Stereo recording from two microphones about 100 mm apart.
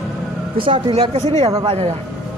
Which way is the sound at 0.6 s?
70° right (ahead or behind).